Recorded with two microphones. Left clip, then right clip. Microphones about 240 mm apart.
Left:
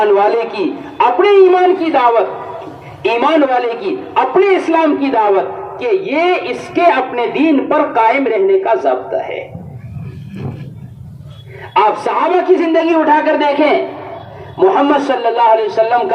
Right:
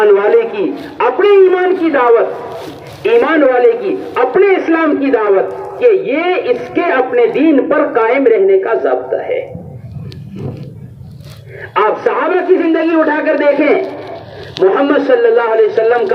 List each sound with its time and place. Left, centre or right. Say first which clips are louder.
0.0 s a sound: right 2 dB; left
1.4 s a man's voice: left 1 dB; left
11.7 s a man's voice: even; left